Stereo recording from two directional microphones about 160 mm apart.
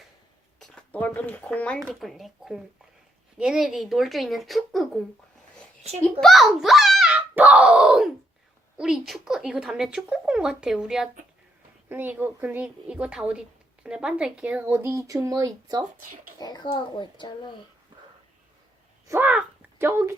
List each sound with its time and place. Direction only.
0.6 s speech: 10° left (ahead or behind)
6.1 s a child's voice: centre (ahead or behind); by 15.8 s 25° right (ahead or behind)
16.4 s a child's voice: 25° left (ahead or behind)
19.0 s a sound: 15° right (ahead or behind)